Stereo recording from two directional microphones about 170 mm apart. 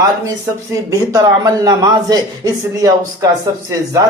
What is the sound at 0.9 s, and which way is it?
A man's voice, 20° right (ahead or behind).